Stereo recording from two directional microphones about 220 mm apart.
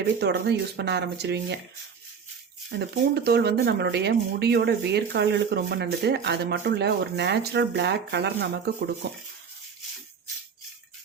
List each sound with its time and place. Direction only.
0.2 s speech: 50° right (ahead or behind)
2.6 s speech: 50° right (ahead or behind)